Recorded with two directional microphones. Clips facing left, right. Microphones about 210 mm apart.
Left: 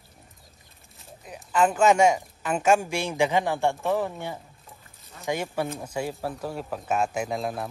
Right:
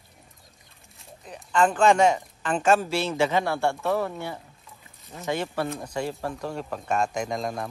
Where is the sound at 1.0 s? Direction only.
5° left (ahead or behind).